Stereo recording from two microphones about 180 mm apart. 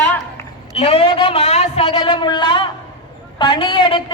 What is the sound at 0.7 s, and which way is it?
A man's voice, 30° left (ahead or behind).